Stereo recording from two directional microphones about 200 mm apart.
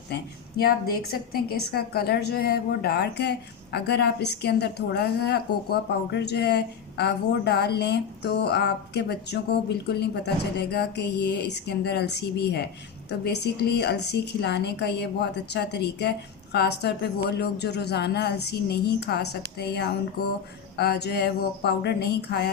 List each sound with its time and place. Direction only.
0.1 s a woman's voice: 50° left (ahead or behind)